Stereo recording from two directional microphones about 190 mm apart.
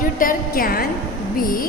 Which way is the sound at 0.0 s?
45° left (ahead or behind).